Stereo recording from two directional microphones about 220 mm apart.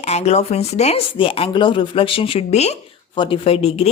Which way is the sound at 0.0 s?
30° left (ahead or behind).